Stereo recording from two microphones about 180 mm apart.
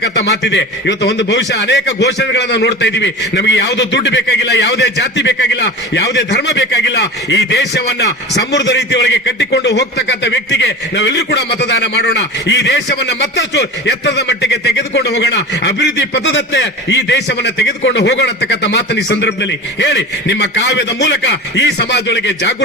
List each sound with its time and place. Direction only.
0.0 s a man's voice: 75° left (ahead or behind)
19.0 s a man's voice: 90° left